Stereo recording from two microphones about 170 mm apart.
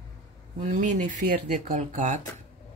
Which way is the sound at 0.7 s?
45° right (ahead or behind).